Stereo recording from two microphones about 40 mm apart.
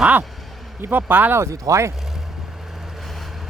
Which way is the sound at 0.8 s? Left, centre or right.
Right.